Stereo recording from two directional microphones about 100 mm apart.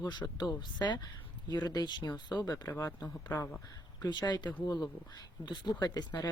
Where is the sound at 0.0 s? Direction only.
45° left (ahead or behind).